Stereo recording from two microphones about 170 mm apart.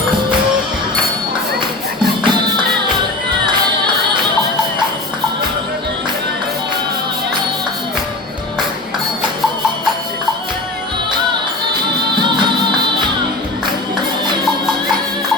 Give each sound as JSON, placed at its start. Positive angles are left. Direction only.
{"t": 2.2, "sound": "music", "side_deg": -25}
{"t": 12.2, "sound": "music", "side_deg": -25}